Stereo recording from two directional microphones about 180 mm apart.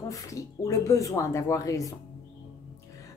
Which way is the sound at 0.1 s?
20° left (ahead or behind).